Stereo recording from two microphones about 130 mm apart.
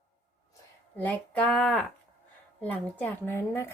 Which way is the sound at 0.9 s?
10° left (ahead or behind).